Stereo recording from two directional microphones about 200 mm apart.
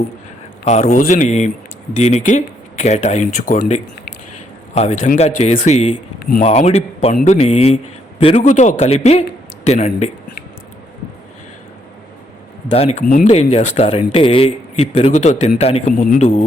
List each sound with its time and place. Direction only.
0.6 s a man's voice: 35° left (ahead or behind)
12.7 s a man's voice: 30° left (ahead or behind)
13.1 s speech: 45° left (ahead or behind)
13.3 s a man's voice: 30° left (ahead or behind)